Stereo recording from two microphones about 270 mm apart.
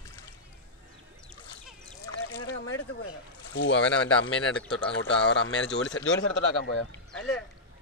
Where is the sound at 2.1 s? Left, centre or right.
Left.